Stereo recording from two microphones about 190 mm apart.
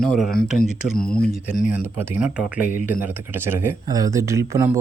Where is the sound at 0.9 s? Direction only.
50° left (ahead or behind).